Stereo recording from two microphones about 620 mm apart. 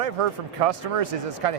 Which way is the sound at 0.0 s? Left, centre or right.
Right.